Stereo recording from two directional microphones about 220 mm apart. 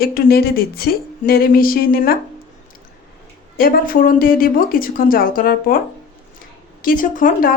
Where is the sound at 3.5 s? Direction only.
40° left (ahead or behind).